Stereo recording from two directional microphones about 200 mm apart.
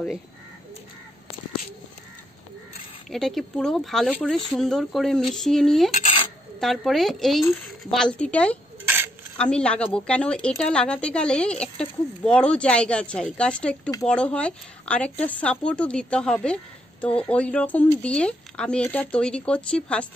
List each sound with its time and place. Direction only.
3.1 s a woman's voice: centre (ahead or behind)
5.9 s a sound: 30° left (ahead or behind)
6.6 s a woman's voice: centre (ahead or behind)
8.8 s cutlery: 10° right (ahead or behind)
9.4 s a woman's voice: 5° left (ahead or behind)